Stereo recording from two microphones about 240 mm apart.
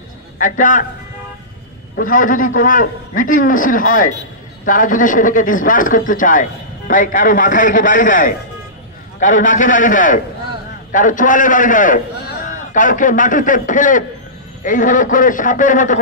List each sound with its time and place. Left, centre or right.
0.4 s a man's voice: left
2.0 s a man's voice: left